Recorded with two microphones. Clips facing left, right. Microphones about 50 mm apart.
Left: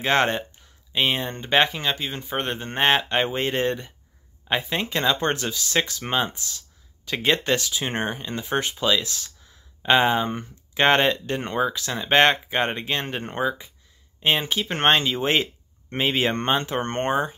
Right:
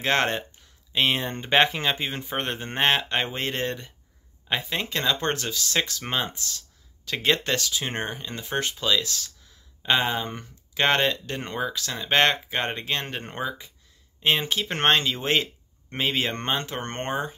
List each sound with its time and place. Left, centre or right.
0.0 s speech: centre